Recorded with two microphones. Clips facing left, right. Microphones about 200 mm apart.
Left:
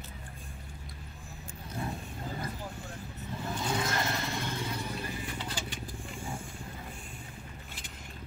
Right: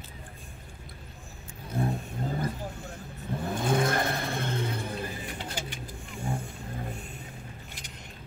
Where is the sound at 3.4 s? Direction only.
55° right (ahead or behind).